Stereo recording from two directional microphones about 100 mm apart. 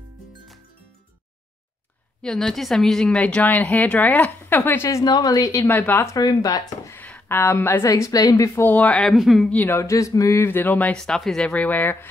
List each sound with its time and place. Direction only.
2.2 s a woman's voice: 5° left (ahead or behind); by 4.8 s 20° left (ahead or behind)
4.8 s a woman's voice: 35° left (ahead or behind)
5.7 s speech: 20° left (ahead or behind)
6.1 s a woman's voice: 40° left (ahead or behind)
7.0 s a woman's voice: 15° left (ahead or behind); by 8.5 s 35° left (ahead or behind)
8.5 s a woman's voice: 15° left (ahead or behind)
9.1 s speech: centre (ahead or behind)
9.5 s a woman's voice: 20° left (ahead or behind)
9.8 s speech: 35° left (ahead or behind)